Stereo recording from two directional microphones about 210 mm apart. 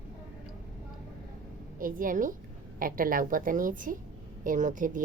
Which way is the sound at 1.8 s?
40° right (ahead or behind).